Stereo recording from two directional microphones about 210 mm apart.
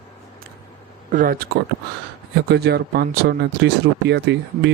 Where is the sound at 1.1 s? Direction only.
45° right (ahead or behind).